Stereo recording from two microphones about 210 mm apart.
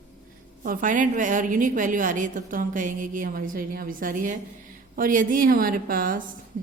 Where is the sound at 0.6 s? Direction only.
40° right (ahead or behind).